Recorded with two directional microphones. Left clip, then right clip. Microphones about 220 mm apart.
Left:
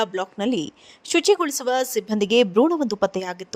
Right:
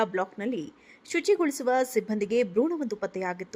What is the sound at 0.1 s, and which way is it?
A woman's voice, 30° left (ahead or behind).